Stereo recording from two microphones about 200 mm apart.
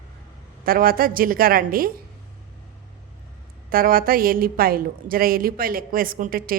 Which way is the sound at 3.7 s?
45° right (ahead or behind).